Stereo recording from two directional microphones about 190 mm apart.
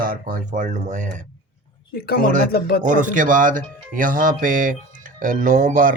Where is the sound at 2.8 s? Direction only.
40° right (ahead or behind).